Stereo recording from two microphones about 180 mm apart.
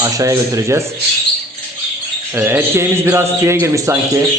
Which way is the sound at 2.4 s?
10° right (ahead or behind).